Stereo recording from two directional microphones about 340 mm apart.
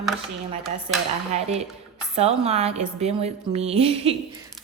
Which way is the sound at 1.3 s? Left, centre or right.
Centre.